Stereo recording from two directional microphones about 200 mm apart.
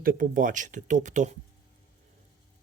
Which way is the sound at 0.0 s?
45° right (ahead or behind).